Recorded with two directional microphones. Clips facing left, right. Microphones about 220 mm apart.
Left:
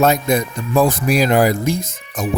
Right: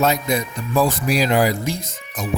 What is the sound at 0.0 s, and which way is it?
Speech, 50° left (ahead or behind).